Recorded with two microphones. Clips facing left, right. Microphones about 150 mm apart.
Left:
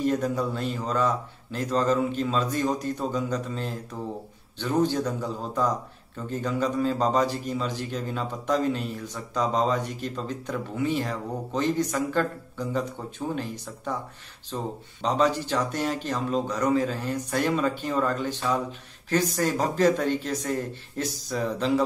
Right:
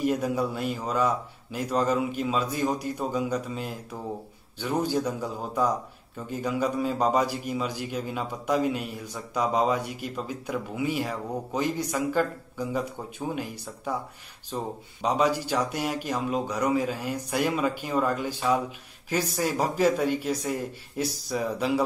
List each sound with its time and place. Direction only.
0.0 s a man's voice: 10° right (ahead or behind)